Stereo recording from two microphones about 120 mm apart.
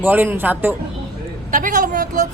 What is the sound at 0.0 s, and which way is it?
Speech, 15° right (ahead or behind).